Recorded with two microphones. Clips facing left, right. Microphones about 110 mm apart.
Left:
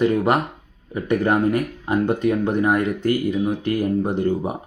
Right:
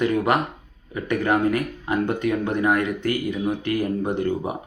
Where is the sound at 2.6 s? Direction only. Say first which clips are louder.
Left 2 dB; 35° left (ahead or behind).